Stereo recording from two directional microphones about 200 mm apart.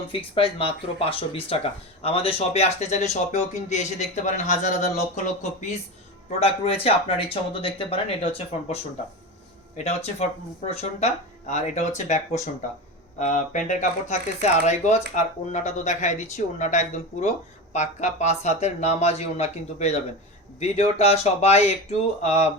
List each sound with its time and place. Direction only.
0.1 s speech: 25° left (ahead or behind)
21.0 s speech: 30° left (ahead or behind)